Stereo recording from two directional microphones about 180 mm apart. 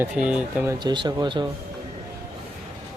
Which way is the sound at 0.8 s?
25° right (ahead or behind).